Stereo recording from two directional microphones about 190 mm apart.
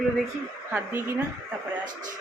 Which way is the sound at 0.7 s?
10° right (ahead or behind).